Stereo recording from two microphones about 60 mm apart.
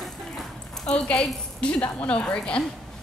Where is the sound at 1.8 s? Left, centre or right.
Left.